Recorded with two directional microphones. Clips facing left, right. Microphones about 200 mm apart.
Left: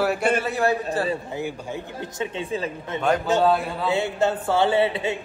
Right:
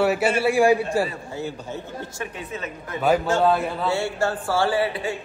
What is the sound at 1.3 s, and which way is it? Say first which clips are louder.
A man's voice: left 1 dB; 15° left (ahead or behind).